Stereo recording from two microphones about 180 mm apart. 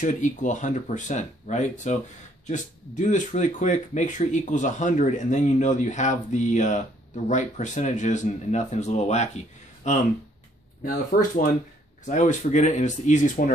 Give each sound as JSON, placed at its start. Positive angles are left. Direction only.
{"t": 0.0, "sound": "speech", "side_deg": 45}